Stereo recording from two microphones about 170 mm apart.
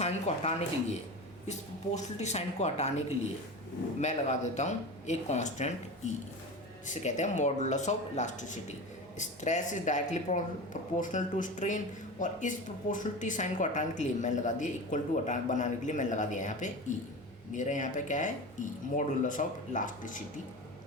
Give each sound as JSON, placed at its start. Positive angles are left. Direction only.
{"t": 0.0, "sound": "speech", "side_deg": 40}
{"t": 4.0, "sound": "speech", "side_deg": 45}
{"t": 6.8, "sound": "speech", "side_deg": 45}